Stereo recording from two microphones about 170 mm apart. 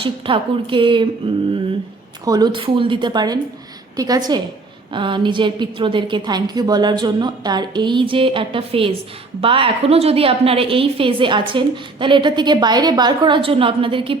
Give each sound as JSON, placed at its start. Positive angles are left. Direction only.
{"t": 0.0, "sound": "a woman's voice", "side_deg": -30}
{"t": 2.2, "sound": "a woman's voice", "side_deg": -25}